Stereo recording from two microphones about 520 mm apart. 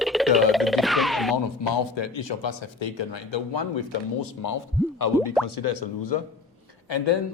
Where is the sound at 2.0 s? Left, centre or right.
Left.